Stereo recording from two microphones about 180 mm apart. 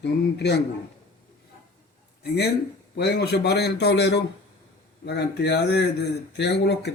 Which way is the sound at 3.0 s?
65° left (ahead or behind).